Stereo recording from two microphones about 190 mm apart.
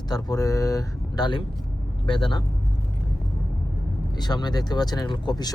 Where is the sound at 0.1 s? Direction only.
20° left (ahead or behind).